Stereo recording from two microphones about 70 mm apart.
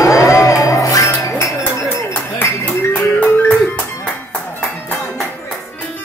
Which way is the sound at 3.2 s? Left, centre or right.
Left.